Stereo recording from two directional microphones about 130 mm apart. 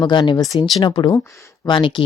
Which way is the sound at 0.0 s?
35° left (ahead or behind).